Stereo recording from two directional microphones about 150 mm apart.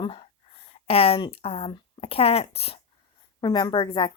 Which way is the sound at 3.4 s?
30° left (ahead or behind).